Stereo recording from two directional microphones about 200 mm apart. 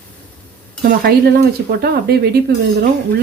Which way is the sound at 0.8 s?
50° right (ahead or behind).